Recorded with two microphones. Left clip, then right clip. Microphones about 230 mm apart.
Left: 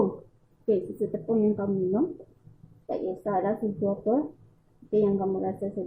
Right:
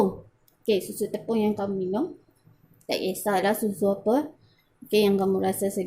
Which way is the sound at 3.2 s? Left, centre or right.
Right.